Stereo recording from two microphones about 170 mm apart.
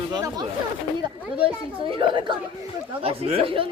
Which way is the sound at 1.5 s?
30° right (ahead or behind).